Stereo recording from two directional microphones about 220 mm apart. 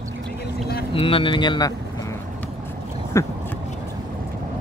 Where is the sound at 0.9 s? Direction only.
25° left (ahead or behind).